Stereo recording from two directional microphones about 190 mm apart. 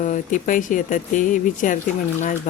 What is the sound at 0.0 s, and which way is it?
Speech, 40° left (ahead or behind).